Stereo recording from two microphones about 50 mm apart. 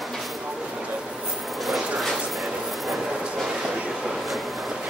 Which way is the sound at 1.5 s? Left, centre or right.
Centre.